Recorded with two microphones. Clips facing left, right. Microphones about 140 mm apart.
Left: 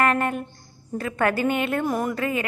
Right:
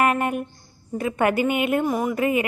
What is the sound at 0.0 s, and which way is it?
Speech, 15° right (ahead or behind).